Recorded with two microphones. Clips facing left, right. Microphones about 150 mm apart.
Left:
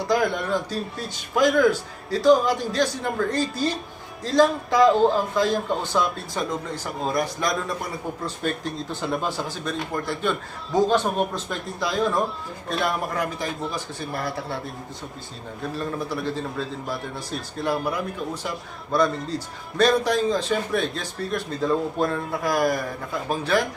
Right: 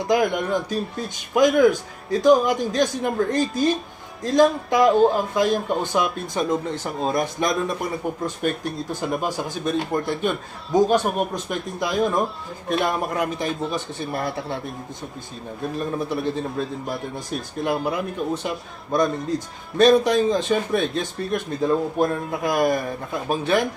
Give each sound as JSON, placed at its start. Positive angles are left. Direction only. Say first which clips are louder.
{"t": 0.1, "sound": "a man's voice", "louder": "right 2 dB", "side_deg": -20}
{"t": 15.7, "sound": "a man's voice", "louder": "right 3 dB", "side_deg": -20}